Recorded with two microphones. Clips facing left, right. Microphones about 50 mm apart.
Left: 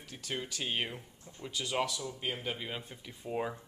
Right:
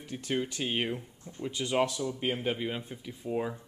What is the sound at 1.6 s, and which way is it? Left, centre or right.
Speech, centre.